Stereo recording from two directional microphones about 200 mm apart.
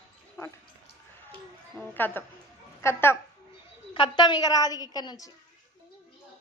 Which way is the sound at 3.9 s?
25° left (ahead or behind).